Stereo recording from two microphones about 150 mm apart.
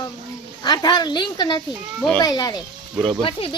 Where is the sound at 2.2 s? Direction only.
25° left (ahead or behind).